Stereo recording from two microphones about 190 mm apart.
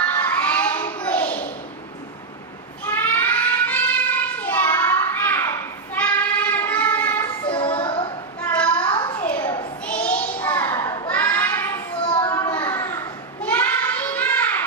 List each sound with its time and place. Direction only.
0.1 s a sound: 10° left (ahead or behind)
2.8 s child singing: 10° left (ahead or behind)
7.2 s child singing: 25° left (ahead or behind)
8.4 s a sound: 5° left (ahead or behind)
12.0 s children playing: 25° left (ahead or behind)
12.3 s children playing: 10° left (ahead or behind)
13.4 s child singing: 10° left (ahead or behind)